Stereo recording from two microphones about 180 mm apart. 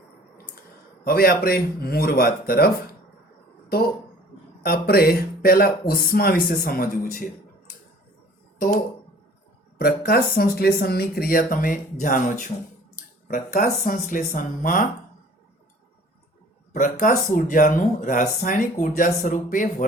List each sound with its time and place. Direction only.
1.0 s speech: 55° left (ahead or behind)
4.6 s speech: 55° left (ahead or behind)
8.5 s speech: 50° left (ahead or behind)
16.7 s speech: 45° left (ahead or behind)